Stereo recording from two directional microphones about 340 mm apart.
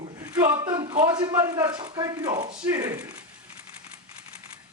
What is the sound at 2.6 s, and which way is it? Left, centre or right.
Speech, centre.